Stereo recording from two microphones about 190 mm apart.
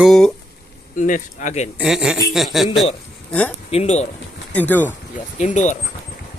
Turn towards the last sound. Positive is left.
turn(degrees=40)  # may be behind; listen again after turning